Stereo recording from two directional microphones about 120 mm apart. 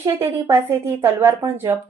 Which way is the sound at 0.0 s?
20° right (ahead or behind).